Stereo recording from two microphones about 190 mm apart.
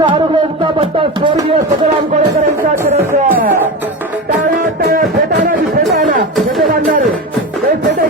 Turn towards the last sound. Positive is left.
turn(degrees=0)  # may be behind; listen again after turning